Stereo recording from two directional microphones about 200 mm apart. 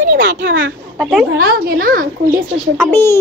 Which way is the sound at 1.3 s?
55° right (ahead or behind).